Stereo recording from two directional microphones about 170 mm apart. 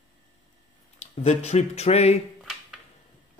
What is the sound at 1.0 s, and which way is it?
Speech, 40° left (ahead or behind).